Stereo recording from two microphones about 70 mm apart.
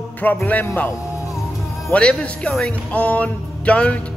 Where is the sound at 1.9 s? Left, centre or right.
Centre.